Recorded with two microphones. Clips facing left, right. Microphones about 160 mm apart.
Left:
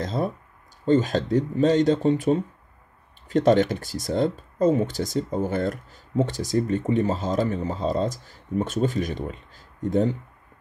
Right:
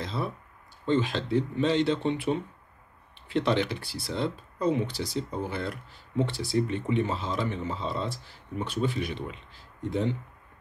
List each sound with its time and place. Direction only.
0.0 s speech: 45° left (ahead or behind)